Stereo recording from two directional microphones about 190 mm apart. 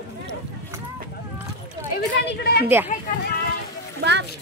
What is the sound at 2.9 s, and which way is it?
Speech, 45° left (ahead or behind).